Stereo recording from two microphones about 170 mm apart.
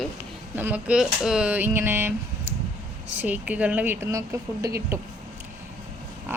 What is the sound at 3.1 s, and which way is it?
Speech, 10° right (ahead or behind).